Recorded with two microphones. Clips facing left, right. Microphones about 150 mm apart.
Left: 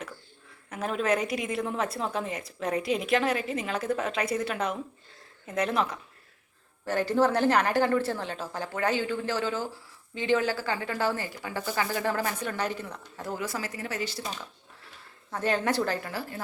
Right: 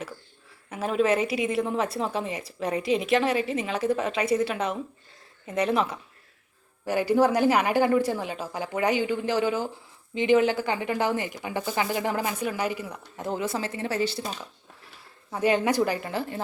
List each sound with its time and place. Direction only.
0.7 s a woman's voice: 5° right (ahead or behind)
13.1 s speech: 20° right (ahead or behind)
15.3 s a woman's voice: 10° right (ahead or behind)